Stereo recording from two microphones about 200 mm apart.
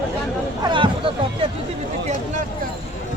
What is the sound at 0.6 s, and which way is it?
Speech, 25° right (ahead or behind).